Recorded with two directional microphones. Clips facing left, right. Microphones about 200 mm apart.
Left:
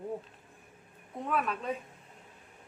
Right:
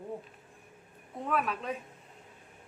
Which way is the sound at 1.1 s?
Centre (ahead or behind).